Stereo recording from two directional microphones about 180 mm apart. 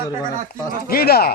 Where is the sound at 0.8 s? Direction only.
55° left (ahead or behind).